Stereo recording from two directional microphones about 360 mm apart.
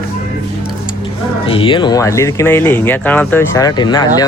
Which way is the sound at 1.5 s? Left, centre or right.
Centre.